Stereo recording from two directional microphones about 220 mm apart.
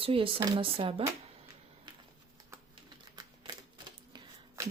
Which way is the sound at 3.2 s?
20° right (ahead or behind).